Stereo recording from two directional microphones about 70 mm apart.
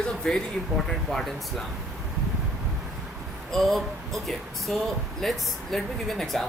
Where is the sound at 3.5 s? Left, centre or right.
Centre.